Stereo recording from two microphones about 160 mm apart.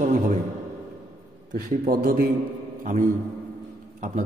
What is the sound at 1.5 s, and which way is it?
Speech, 65° right (ahead or behind).